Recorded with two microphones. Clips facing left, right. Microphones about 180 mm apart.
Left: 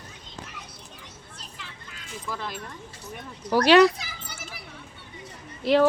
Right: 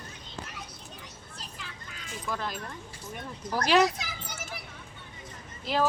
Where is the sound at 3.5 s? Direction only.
80° left.